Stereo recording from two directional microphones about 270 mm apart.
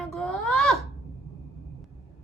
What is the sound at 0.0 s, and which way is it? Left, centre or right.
Wail, centre.